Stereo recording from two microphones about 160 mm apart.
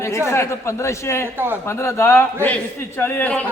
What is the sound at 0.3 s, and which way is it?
A man's voice, 15° left (ahead or behind).